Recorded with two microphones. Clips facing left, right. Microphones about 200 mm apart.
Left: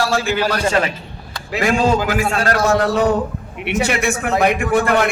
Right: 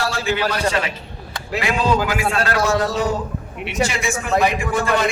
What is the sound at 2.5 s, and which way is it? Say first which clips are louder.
A man's voice: left 5 dB; 60° left (ahead or behind).